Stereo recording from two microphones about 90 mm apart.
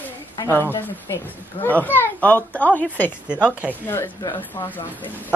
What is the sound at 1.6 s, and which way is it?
Speech, 20° left (ahead or behind).